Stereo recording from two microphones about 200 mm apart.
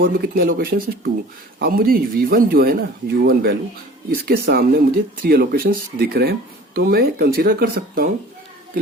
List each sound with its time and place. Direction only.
0.0 s speech: 45° right (ahead or behind)